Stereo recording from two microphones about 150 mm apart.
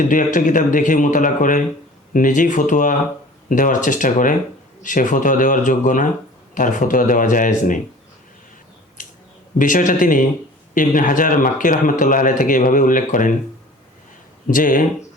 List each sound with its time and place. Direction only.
0.0 s speech: 60° left (ahead or behind)
9.6 s speech: 60° left (ahead or behind)
14.4 s speech: 65° left (ahead or behind)